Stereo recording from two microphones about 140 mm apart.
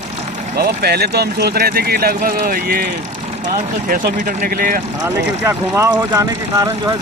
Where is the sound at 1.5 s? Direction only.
90° right.